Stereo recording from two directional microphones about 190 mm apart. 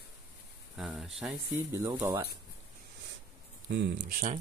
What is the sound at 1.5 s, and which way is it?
Speech, 15° right (ahead or behind).